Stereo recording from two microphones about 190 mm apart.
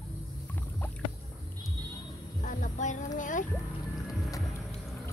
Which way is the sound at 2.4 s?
40° left (ahead or behind).